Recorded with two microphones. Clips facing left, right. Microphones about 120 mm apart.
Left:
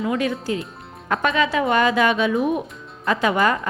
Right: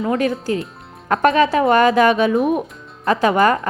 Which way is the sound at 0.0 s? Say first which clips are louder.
Right 3 dB; 40° right (ahead or behind).